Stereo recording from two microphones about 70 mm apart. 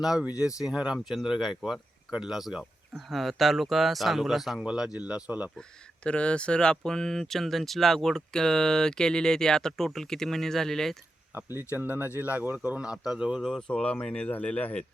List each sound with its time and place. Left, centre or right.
0.0 s speech: centre
5.5 s speech: centre
11.3 s speech: right; by 13.6 s centre
13.6 s speech: centre